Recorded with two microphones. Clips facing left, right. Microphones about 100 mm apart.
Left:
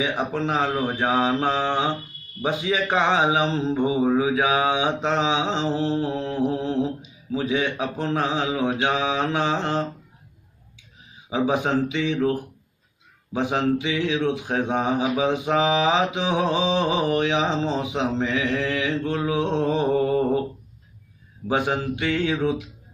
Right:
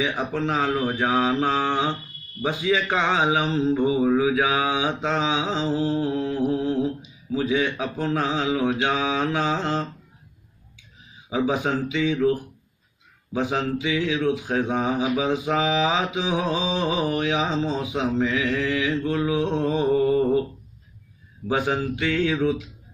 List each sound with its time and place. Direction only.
0.0 s speech: 20° left (ahead or behind)
11.2 s speech: 20° left (ahead or behind)
13.3 s speech: 20° left (ahead or behind)
21.5 s speech: 20° left (ahead or behind)